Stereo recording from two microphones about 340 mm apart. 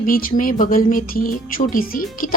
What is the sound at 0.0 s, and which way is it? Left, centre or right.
A woman's voice, left.